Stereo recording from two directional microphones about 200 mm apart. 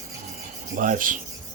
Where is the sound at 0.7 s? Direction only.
45° right (ahead or behind).